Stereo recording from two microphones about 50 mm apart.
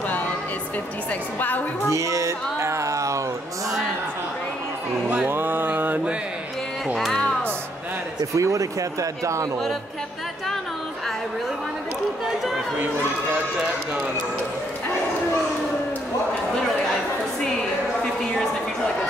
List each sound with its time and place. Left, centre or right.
1.9 s music: right
5.3 s a sound: right
8.4 s speech: right
12.7 s speech: right